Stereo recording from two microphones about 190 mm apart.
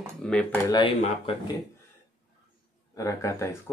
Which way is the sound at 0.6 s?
25° left (ahead or behind).